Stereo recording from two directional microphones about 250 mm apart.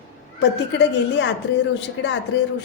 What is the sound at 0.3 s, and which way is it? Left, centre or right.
A woman's voice, left.